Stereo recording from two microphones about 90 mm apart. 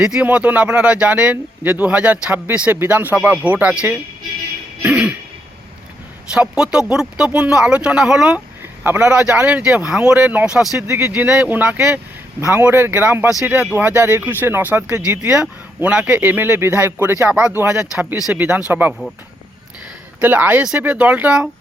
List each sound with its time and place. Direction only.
0.0 s speech: 10° right (ahead or behind)
6.3 s speech: 10° right (ahead or behind)
8.9 s speech: 30° right (ahead or behind)
9.5 s speech: 15° right (ahead or behind)
10.8 s speech: 30° right (ahead or behind)
11.1 s speech: 15° right (ahead or behind)
12.4 s speech: 30° right (ahead or behind)
20.2 s speech: 20° right (ahead or behind)